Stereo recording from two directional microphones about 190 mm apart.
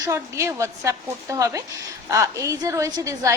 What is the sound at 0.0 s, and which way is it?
A woman's voice, 15° right (ahead or behind).